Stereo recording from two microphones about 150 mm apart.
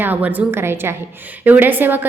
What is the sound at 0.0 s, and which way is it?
A woman's voice, 10° right (ahead or behind).